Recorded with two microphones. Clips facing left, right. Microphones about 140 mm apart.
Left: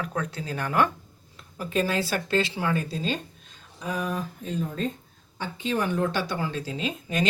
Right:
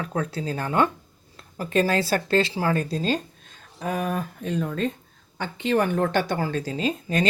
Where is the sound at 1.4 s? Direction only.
40° right (ahead or behind).